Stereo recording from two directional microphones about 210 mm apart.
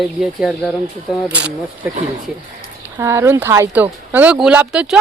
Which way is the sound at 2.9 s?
10° right (ahead or behind).